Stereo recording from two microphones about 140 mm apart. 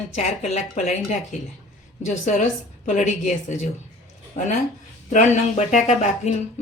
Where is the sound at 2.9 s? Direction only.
60° left (ahead or behind).